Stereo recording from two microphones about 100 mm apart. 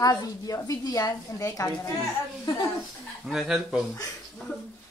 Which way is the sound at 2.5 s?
50° left (ahead or behind).